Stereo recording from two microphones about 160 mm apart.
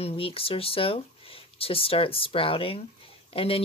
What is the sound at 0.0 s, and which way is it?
Speech, 35° left (ahead or behind).